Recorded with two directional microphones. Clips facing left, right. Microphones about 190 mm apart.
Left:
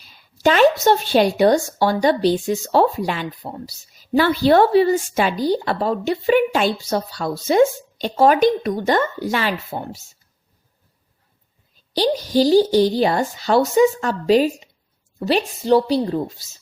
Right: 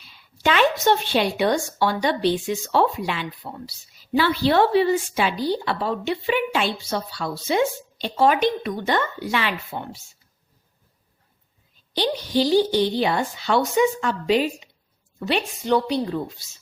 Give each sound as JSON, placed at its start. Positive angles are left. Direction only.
{"t": 0.0, "sound": "a woman's voice", "side_deg": 40}
{"t": 11.9, "sound": "speech", "side_deg": 40}